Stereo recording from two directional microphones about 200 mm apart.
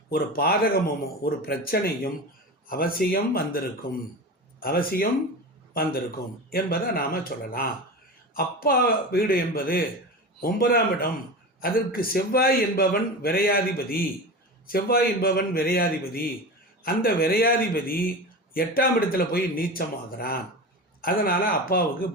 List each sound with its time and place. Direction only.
0.1 s a man's voice: 50° left (ahead or behind)